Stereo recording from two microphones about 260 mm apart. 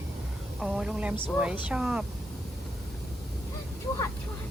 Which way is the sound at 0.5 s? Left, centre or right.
Centre.